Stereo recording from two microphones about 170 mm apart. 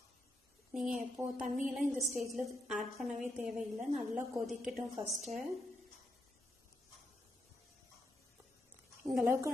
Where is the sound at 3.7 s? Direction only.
40° right (ahead or behind).